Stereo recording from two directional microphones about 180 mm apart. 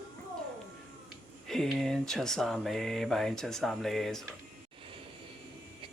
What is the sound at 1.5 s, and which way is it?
Mantra, centre (ahead or behind).